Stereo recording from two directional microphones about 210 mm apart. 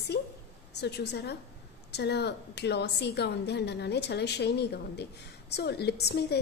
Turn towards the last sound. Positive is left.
turn(degrees=50)  # may be behind; listen again after turning